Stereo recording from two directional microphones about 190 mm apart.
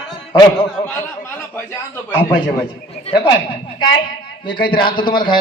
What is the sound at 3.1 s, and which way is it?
Speech, 30° left (ahead or behind).